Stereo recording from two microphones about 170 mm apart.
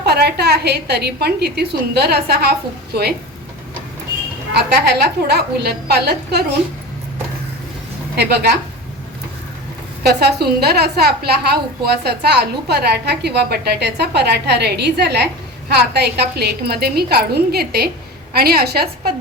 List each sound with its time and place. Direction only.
0.0 s a woman's voice: 70° right (ahead or behind)
4.5 s a woman's voice: 75° right (ahead or behind)
8.1 s a woman's voice: 70° right (ahead or behind)
10.0 s a woman's voice: 70° right (ahead or behind)